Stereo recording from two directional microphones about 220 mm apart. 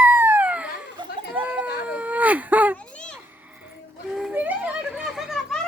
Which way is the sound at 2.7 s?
5° left (ahead or behind).